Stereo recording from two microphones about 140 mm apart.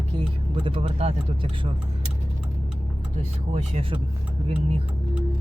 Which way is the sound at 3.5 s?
45° right (ahead or behind).